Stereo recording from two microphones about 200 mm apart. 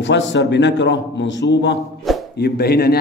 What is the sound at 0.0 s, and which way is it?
Speech, 65° left (ahead or behind).